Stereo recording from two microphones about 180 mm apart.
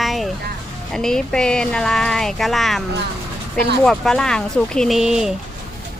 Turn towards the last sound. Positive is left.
turn(degrees=-5)  # may be behind; listen again after turning